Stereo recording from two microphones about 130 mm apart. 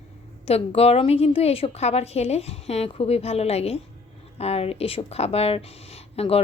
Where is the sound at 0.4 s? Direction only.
50° left (ahead or behind).